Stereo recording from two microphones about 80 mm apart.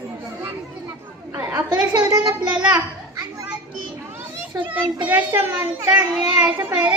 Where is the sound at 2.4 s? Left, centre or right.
Centre.